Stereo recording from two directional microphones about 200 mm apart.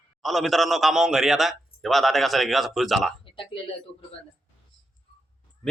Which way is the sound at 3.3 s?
25° left (ahead or behind).